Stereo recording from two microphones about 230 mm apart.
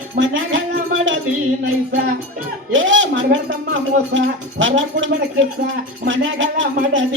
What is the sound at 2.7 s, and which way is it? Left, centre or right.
A woman's voice, right.